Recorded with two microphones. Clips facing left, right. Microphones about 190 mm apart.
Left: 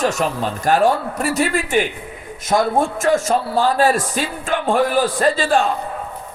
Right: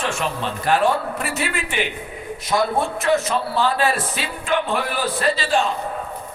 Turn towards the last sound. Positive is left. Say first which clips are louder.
# left 4 dB
turn(degrees=50)  # may be behind; listen again after turning